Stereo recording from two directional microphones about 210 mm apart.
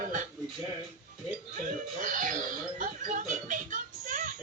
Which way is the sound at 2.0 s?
40° right (ahead or behind).